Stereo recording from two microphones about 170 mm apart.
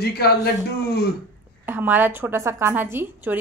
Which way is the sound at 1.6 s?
10° right (ahead or behind).